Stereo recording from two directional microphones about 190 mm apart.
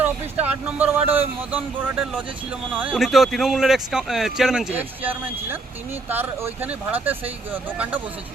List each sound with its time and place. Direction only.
0.0 s speech: 10° right (ahead or behind)